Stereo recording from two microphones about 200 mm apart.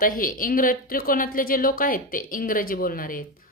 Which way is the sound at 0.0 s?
45° left (ahead or behind).